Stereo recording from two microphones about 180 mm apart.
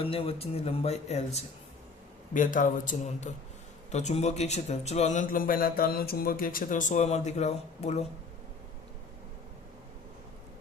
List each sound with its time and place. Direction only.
0.0 s speech: 30° left (ahead or behind)
2.3 s a man's voice: 45° left (ahead or behind)